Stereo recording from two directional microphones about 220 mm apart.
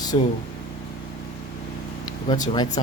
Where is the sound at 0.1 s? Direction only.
25° left (ahead or behind).